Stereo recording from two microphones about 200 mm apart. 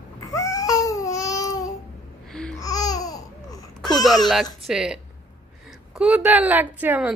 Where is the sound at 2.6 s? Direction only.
20° left (ahead or behind).